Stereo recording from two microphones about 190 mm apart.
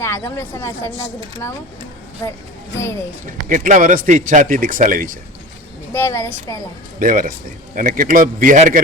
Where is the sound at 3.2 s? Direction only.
45° right (ahead or behind).